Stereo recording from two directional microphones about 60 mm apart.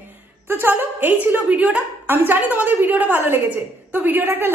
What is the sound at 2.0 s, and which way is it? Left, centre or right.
A woman's voice, right.